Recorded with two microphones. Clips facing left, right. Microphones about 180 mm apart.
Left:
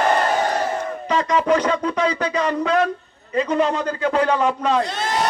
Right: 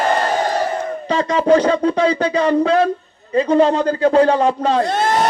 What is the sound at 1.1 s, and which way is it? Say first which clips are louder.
A man's voice: right 4 dB; 30° right (ahead or behind).